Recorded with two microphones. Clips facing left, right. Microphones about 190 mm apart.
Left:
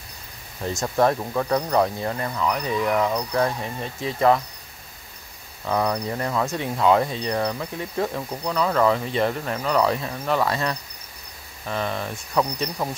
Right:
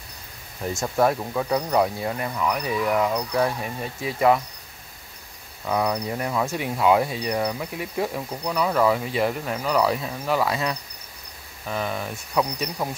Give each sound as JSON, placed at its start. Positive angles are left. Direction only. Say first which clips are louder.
{"t": 0.9, "sound": "speech", "louder": "left 1 dB", "side_deg": -5}
{"t": 5.7, "sound": "speech", "louder": "left 1 dB", "side_deg": -5}